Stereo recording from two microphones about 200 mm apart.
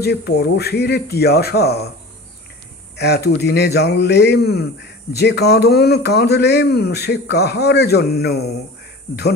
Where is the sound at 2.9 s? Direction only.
55° left (ahead or behind).